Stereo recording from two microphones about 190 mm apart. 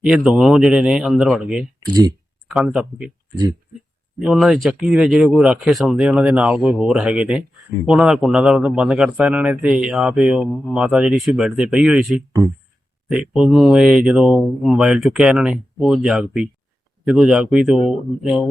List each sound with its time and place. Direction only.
0.3 s speech: centre (ahead or behind)
4.2 s speech: centre (ahead or behind)